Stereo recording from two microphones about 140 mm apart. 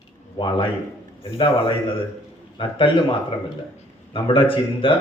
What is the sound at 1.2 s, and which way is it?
A man's voice, 40° left (ahead or behind).